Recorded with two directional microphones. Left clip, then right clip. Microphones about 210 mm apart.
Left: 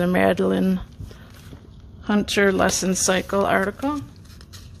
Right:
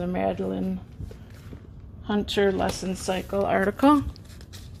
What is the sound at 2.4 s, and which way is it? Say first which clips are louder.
Speech: left 5 dB; 35° left (ahead or behind).